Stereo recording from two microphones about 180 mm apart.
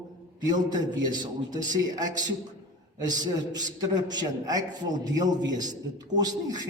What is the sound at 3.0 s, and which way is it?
A man's voice, 20° right (ahead or behind).